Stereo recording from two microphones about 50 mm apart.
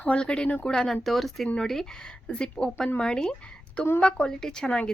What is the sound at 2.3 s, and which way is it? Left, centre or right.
A woman's voice, left.